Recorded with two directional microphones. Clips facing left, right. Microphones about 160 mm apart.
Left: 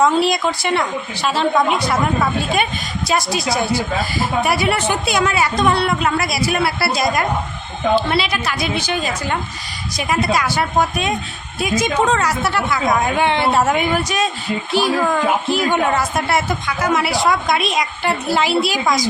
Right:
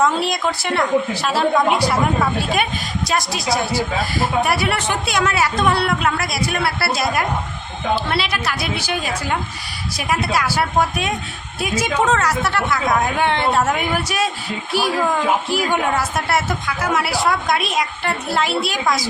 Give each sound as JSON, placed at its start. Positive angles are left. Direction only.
{"t": 0.0, "sound": "a woman's voice", "side_deg": 0}
{"t": 3.1, "sound": "a woman's voice", "side_deg": 0}